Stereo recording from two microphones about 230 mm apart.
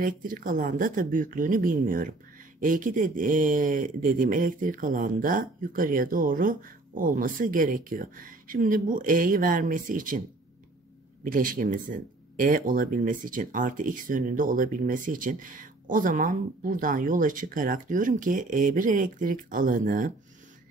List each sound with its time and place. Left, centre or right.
0.0 s speech: right
11.2 s speech: right